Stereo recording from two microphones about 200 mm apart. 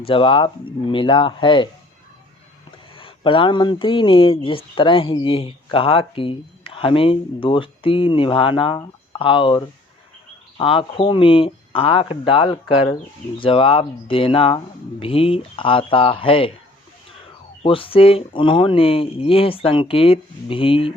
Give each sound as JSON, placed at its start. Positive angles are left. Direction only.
{"t": 0.0, "sound": "speech", "side_deg": 25}
{"t": 2.9, "sound": "speech", "side_deg": 25}
{"t": 17.6, "sound": "speech", "side_deg": 25}